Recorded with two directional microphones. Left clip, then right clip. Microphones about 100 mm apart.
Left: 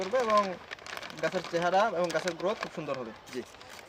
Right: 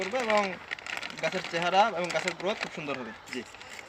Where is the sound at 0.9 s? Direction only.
15° left (ahead or behind).